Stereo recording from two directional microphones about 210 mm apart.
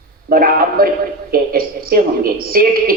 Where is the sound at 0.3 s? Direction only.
45° right (ahead or behind).